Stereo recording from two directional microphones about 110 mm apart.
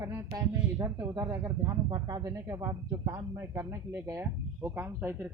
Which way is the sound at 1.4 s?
40° right (ahead or behind).